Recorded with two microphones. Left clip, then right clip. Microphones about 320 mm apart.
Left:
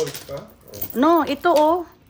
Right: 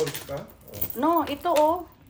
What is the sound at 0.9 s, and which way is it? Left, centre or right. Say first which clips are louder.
Speech: left 6 dB; left.